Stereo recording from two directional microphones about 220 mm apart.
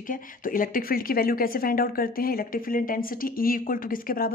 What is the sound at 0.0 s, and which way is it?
Speech, 40° left (ahead or behind).